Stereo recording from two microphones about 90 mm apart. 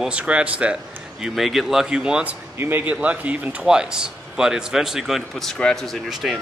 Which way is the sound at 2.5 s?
25° right (ahead or behind).